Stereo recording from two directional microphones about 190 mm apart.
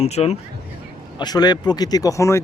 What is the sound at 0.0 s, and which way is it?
Speech, 35° left (ahead or behind).